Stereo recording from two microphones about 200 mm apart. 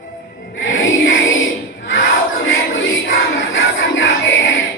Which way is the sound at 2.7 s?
75° left (ahead or behind).